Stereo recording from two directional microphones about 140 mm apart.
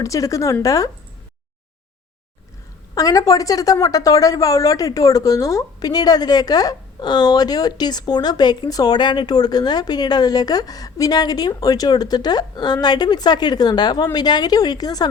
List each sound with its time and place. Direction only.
0.0 s a woman's voice: 25° left (ahead or behind)
2.9 s a woman's voice: 25° left (ahead or behind)